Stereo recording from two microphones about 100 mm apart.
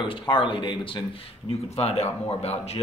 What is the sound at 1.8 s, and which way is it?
Speech, 90° left.